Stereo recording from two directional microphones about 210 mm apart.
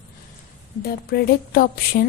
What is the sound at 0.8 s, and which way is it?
Speech, 50° left (ahead or behind).